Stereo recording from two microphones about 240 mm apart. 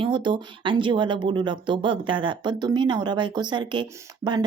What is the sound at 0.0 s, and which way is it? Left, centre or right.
Speech, centre.